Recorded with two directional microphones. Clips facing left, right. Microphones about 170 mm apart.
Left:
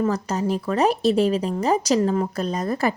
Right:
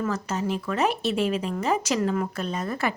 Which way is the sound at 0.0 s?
35° left (ahead or behind).